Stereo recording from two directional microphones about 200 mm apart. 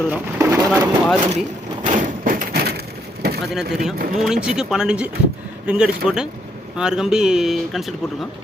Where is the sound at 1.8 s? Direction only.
45° right (ahead or behind).